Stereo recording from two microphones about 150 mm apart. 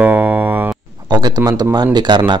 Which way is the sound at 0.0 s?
10° right (ahead or behind).